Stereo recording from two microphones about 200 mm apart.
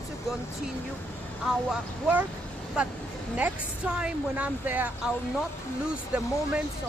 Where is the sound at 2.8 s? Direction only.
5° right (ahead or behind).